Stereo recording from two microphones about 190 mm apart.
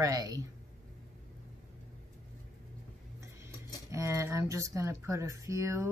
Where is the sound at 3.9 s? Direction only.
15° right (ahead or behind).